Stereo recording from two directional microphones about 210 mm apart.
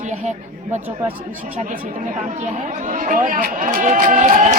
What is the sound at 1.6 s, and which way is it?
Speech, 35° right (ahead or behind).